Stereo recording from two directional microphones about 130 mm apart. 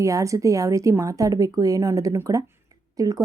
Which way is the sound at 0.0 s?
25° right (ahead or behind).